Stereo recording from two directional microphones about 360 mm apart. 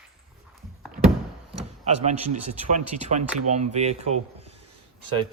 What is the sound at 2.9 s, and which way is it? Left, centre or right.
Speech, centre.